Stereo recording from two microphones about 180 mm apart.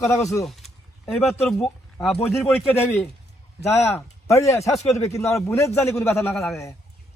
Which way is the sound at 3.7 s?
15° left (ahead or behind).